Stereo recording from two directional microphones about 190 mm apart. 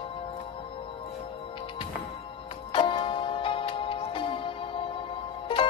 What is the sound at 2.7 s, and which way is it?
Music, 25° left (ahead or behind).